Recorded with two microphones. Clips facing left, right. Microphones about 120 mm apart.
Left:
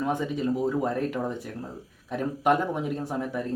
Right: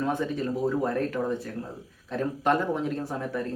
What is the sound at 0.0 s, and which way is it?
Speech, 15° left (ahead or behind).